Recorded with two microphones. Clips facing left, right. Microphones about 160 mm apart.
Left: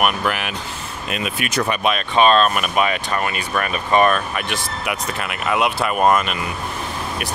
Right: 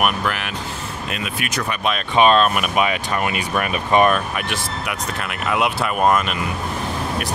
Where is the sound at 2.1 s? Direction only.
10° right (ahead or behind).